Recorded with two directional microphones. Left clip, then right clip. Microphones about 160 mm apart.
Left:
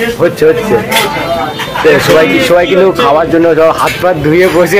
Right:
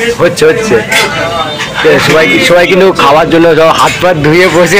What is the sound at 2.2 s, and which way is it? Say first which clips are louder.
A man's voice: right 2 dB; 10° right (ahead or behind).